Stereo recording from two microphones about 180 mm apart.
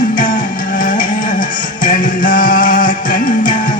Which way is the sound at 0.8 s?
50° left (ahead or behind).